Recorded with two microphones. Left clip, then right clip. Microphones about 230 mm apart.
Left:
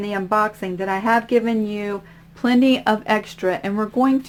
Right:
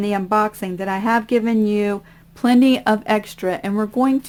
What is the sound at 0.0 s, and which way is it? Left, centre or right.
Speech, right.